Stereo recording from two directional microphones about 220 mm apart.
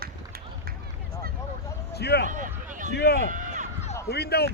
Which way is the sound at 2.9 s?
45° left (ahead or behind).